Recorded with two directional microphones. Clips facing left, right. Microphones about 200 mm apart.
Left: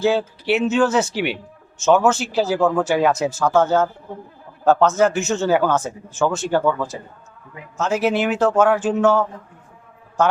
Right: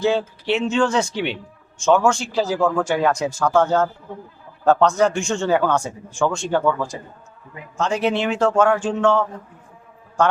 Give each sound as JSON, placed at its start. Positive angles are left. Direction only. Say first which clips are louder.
{"t": 0.0, "sound": "speech", "louder": "left 1 dB", "side_deg": 5}
{"t": 7.8, "sound": "speech", "louder": "left 1 dB", "side_deg": 5}
{"t": 10.2, "sound": "mantra", "louder": "even", "side_deg": 5}